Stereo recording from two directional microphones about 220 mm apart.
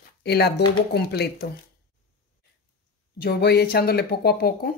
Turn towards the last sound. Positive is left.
turn(degrees=45)  # may be behind; listen again after turning